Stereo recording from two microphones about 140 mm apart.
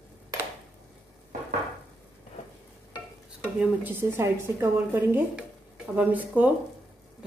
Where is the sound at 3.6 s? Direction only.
15° right (ahead or behind).